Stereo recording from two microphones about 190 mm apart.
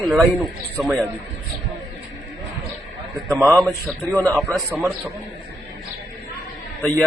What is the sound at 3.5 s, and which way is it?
A man's voice, 10° left (ahead or behind).